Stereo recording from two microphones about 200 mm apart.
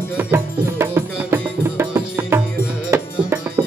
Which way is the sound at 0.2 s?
10° right (ahead or behind).